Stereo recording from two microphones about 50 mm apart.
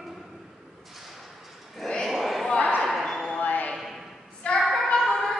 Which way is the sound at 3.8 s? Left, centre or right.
Centre.